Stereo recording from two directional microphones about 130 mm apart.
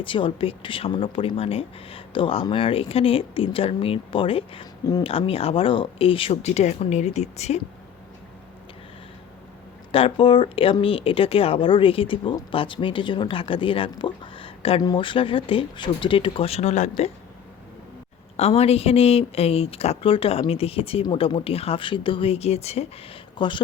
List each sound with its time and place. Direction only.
0.0 s speech: 40° left (ahead or behind); by 7.6 s 55° left (ahead or behind)
9.9 s speech: 45° left (ahead or behind)
14.8 s speech: 35° left (ahead or behind); by 17.1 s 60° left (ahead or behind)
18.3 s speech: 50° left (ahead or behind)
23.4 s speech: 40° left (ahead or behind)